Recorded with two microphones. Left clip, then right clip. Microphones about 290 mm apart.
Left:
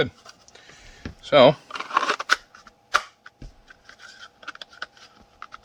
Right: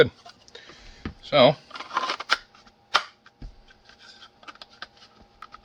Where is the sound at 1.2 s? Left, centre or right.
Centre.